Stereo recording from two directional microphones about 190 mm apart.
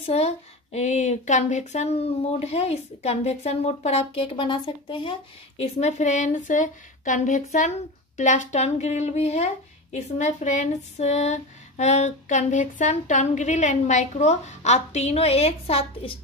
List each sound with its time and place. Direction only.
0.0 s speech: 35° left (ahead or behind)
5.6 s speech: 35° left (ahead or behind)